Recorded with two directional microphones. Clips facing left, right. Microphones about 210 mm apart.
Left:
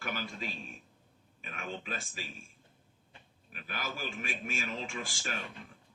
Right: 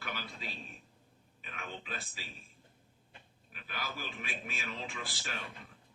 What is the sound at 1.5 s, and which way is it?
Speech, 45° left (ahead or behind).